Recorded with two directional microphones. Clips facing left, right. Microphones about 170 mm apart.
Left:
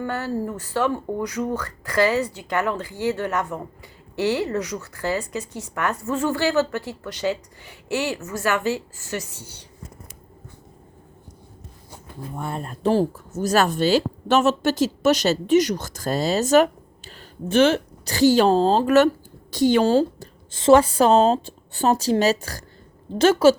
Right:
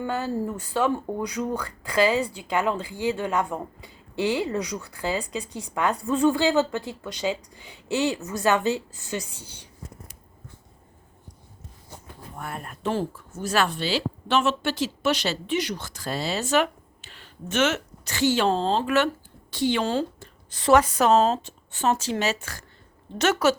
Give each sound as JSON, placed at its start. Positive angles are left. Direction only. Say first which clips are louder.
{"t": 0.0, "sound": "a woman's voice", "louder": "left 1 dB", "side_deg": -15}
{"t": 12.4, "sound": "speech", "louder": "left 6 dB", "side_deg": 25}
{"t": 20.5, "sound": "speech", "louder": "left 4 dB", "side_deg": 25}